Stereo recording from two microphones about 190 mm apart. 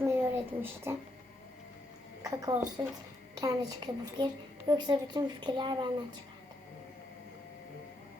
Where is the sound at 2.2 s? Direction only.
20° right (ahead or behind).